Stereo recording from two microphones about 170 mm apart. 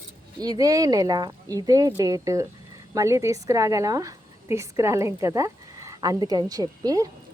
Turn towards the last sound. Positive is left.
turn(degrees=-20)  # may be behind; listen again after turning